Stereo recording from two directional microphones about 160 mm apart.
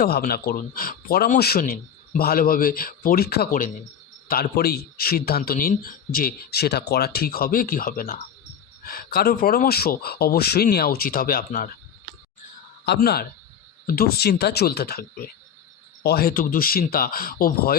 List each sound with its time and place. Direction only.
0.0 s a man's voice: 70° left (ahead or behind)
12.8 s speech: 90° left
13.8 s a man's voice: 70° left (ahead or behind)